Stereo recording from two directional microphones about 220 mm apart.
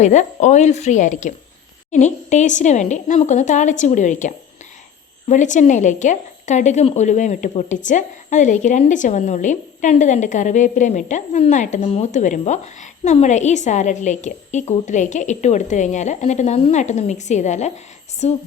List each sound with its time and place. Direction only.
0.0 s a woman's voice: 30° left (ahead or behind)
5.3 s a woman's voice: 35° left (ahead or behind)